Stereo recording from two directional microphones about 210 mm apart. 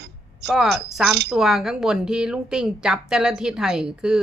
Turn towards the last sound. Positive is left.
turn(degrees=-5)  # may be behind; listen again after turning